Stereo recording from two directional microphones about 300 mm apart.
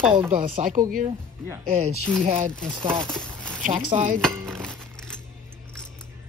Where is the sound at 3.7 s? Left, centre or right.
Right.